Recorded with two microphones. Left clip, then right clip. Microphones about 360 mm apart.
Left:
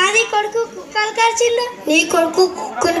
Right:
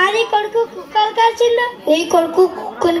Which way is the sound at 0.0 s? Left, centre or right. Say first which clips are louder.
Even; right.